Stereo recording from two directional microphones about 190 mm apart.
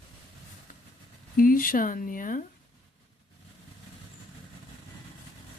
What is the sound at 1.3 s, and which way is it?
Speech, 50° left (ahead or behind).